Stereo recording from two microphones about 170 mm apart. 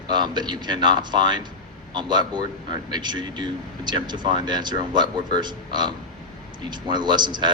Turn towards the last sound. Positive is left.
turn(degrees=-25)  # may be behind; listen again after turning